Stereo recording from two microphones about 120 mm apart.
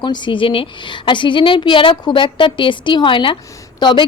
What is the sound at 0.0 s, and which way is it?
A woman's voice, 40° left (ahead or behind).